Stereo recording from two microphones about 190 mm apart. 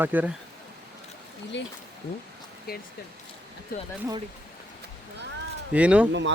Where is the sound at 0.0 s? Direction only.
10° right (ahead or behind).